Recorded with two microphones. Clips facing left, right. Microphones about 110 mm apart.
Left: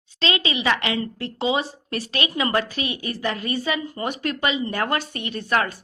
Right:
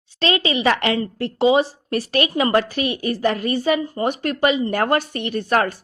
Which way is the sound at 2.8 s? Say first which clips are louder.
Right 6 dB; 40° right (ahead or behind).